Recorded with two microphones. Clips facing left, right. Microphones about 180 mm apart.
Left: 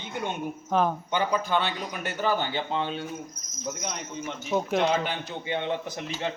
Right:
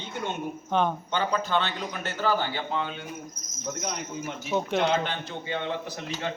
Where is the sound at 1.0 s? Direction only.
10° left (ahead or behind); by 3.0 s 30° left (ahead or behind).